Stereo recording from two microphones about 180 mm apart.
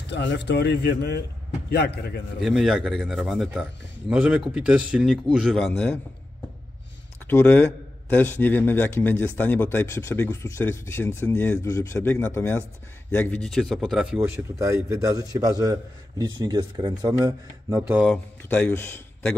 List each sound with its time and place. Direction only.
0.0 s a man's voice: 75° left (ahead or behind)
2.4 s speech: centre (ahead or behind)
5.7 s a man's voice: 10° left (ahead or behind)
7.2 s a man's voice: 10° left (ahead or behind)
14.3 s a man's voice: 15° right (ahead or behind)
18.4 s a man's voice: 10° left (ahead or behind)